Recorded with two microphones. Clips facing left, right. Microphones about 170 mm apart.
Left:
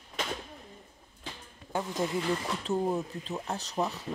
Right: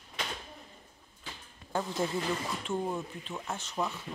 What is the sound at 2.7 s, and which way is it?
Speech, 35° left (ahead or behind).